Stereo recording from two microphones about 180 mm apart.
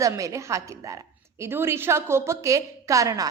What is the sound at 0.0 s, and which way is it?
A woman's voice, 20° right (ahead or behind).